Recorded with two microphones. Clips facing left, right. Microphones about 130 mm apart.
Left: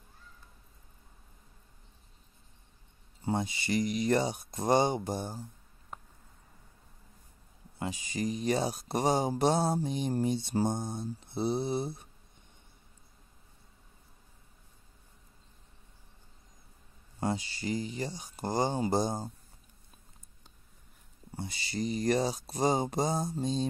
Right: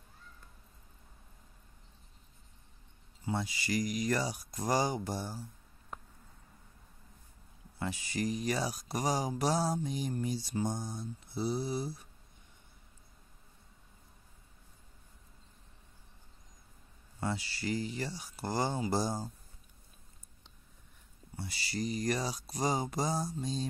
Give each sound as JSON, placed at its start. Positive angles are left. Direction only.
{"t": 3.3, "sound": "speech", "side_deg": 25}
{"t": 7.8, "sound": "speech", "side_deg": 15}
{"t": 10.6, "sound": "speech", "side_deg": 60}
{"t": 11.3, "sound": "speech", "side_deg": 25}
{"t": 17.4, "sound": "speech", "side_deg": 20}
{"t": 21.4, "sound": "speech", "side_deg": 20}